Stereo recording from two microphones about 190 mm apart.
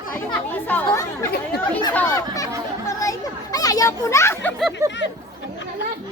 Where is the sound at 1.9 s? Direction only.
15° left (ahead or behind).